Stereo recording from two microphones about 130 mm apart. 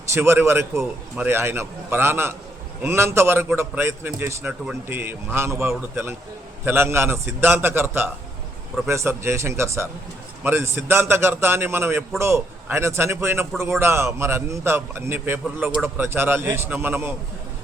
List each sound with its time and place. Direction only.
0.1 s a man's voice: 15° right (ahead or behind)